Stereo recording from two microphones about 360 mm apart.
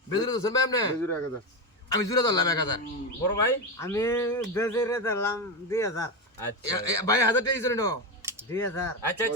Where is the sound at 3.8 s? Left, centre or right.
Centre.